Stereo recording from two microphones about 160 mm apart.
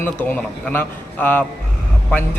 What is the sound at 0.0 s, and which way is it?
A man's voice, 10° left (ahead or behind).